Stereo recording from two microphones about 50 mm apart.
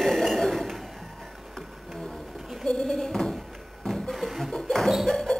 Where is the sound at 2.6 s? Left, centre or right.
Centre.